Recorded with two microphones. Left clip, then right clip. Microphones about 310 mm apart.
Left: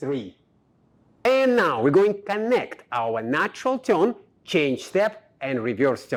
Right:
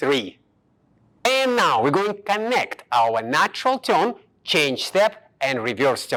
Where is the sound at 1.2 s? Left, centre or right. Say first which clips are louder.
Right 1 dB; right.